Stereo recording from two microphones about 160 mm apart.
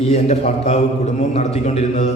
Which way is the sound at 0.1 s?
45° left (ahead or behind).